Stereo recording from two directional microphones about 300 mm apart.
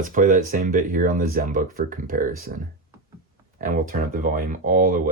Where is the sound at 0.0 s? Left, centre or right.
Right.